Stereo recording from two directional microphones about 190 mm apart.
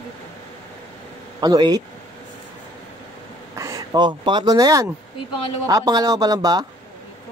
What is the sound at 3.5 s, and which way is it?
Speech, 15° right (ahead or behind).